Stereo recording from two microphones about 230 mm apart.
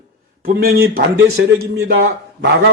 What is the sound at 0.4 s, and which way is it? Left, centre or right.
A man's voice, right.